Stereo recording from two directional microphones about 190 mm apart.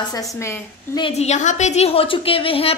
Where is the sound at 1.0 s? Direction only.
35° left (ahead or behind).